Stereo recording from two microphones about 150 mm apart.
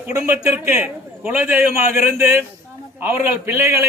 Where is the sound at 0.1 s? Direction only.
15° right (ahead or behind).